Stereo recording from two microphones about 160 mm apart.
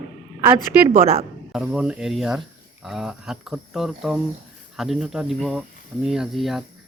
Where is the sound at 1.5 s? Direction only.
5° right (ahead or behind).